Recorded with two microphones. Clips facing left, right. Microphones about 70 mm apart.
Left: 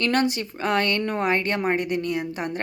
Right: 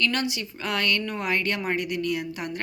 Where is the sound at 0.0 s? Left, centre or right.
Left.